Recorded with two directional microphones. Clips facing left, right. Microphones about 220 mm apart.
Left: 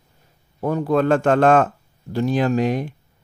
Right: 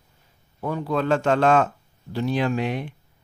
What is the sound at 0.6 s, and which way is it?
Speech, 45° left (ahead or behind).